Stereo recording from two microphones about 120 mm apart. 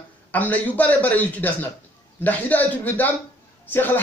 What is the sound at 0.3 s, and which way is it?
A man's voice, 15° left (ahead or behind).